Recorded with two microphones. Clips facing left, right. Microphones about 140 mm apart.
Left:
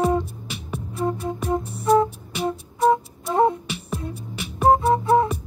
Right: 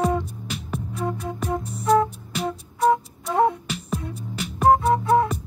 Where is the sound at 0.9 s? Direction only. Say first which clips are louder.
Left 4 dB; 25° left (ahead or behind).